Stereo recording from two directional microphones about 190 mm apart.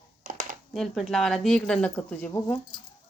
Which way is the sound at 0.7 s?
Centre (ahead or behind).